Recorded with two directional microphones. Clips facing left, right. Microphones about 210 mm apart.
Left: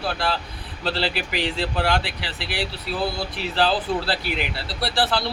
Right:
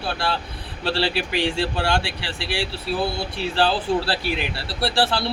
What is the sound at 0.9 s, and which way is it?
Speech, 30° right (ahead or behind).